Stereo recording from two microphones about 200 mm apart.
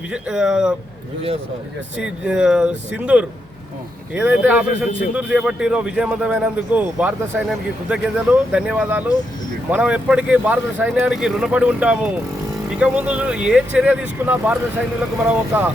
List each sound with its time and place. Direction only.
0.1 s a man's voice: 5° right (ahead or behind)
2.0 s a man's voice: 5° right (ahead or behind)